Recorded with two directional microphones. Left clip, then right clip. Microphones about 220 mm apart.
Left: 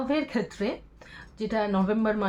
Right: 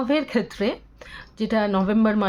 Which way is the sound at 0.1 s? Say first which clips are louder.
Right 6 dB; 50° right (ahead or behind).